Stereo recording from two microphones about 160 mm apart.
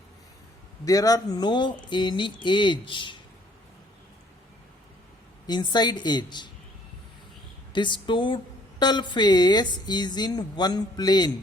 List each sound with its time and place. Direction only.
0.9 s a woman's voice: 20° left (ahead or behind)
5.5 s a woman's voice: 25° left (ahead or behind)
7.7 s a woman's voice: 30° left (ahead or behind)